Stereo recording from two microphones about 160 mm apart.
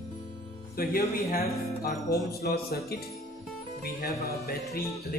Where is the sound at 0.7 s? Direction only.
70° left (ahead or behind).